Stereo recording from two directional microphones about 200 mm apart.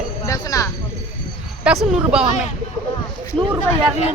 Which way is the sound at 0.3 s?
15° left (ahead or behind).